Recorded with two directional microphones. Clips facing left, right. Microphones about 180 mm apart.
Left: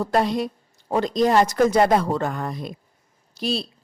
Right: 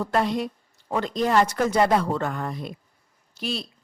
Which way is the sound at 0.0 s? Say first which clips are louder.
Left 3 dB; 35° left (ahead or behind).